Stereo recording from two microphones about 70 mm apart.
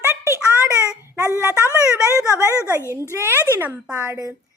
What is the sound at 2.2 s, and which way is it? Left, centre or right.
Speech, left.